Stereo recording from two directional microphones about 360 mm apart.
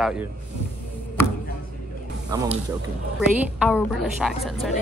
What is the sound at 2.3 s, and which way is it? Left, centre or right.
Speech, centre.